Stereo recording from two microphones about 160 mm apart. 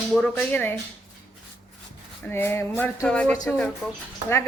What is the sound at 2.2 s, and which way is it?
Speech, 15° left (ahead or behind).